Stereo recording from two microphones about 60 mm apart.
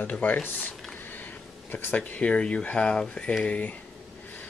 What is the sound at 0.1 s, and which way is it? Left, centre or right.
Speech, left.